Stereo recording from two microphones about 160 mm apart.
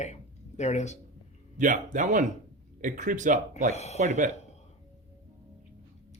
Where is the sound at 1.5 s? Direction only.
55° right (ahead or behind).